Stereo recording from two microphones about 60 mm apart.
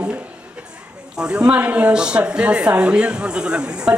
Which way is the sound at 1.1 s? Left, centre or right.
Centre.